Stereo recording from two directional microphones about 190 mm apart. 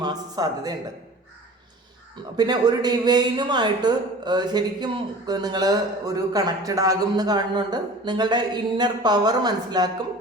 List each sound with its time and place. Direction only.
0.0 s speech: 20° right (ahead or behind)
2.3 s speech: 20° right (ahead or behind)